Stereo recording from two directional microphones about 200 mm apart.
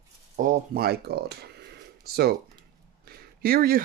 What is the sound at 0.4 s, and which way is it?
Speech, 45° right (ahead or behind).